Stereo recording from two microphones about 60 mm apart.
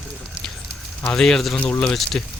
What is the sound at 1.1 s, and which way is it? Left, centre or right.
Speech, centre.